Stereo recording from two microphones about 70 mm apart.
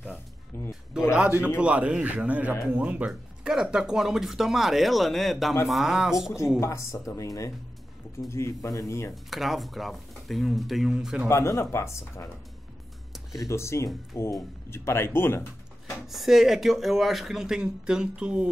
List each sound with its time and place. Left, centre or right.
0.5 s music: left
1.6 s a man's voice: centre
3.1 s speech: centre
6.6 s speech: left
9.1 s speech: centre
11.2 s speech: left
13.1 s music: centre
13.5 s speech: left
16.1 s speech: centre